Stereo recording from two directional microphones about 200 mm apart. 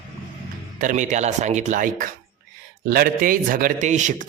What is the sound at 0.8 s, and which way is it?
A man's voice, 40° right (ahead or behind).